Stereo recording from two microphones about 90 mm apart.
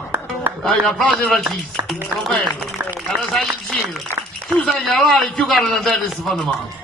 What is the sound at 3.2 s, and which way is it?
A man's voice, 5° left (ahead or behind).